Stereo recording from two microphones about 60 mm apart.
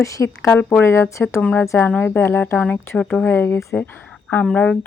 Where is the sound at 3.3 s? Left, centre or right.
Left.